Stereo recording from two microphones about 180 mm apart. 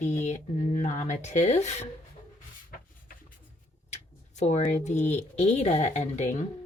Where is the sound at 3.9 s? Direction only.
40° left (ahead or behind).